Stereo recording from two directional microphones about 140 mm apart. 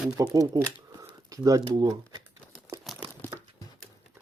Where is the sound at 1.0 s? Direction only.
25° right (ahead or behind).